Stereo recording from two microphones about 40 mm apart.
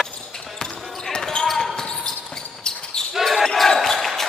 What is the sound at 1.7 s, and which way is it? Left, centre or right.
Basketball bounce, centre.